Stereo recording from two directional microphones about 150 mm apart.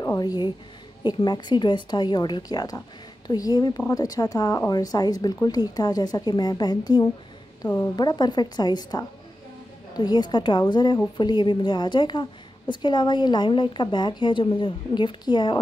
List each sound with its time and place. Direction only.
0.0 s a sound: 25° left (ahead or behind)
1.0 s speech: 30° left (ahead or behind)
7.6 s a woman's voice: 15° left (ahead or behind)
7.9 s a woman's voice: 30° left (ahead or behind)